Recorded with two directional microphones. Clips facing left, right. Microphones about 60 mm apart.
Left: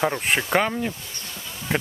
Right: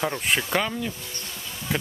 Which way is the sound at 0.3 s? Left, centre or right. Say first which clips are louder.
Left 2 dB; left.